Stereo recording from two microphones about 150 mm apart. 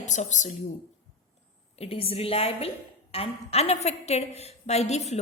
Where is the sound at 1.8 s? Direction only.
40° left (ahead or behind).